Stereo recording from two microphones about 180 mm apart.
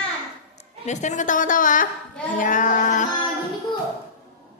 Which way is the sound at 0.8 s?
40° left (ahead or behind).